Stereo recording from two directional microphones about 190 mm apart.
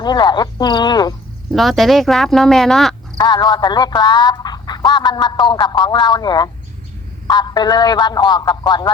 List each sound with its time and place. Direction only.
0.0 s speech: 20° left (ahead or behind)
1.5 s speech: centre (ahead or behind)
3.2 s speech: 20° left (ahead or behind)